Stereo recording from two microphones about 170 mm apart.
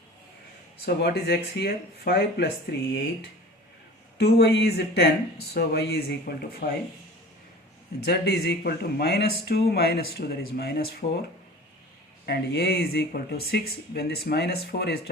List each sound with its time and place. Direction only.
0.9 s speech: 70° left (ahead or behind)
8.0 s speech: 70° left (ahead or behind)
12.2 s speech: 70° left (ahead or behind)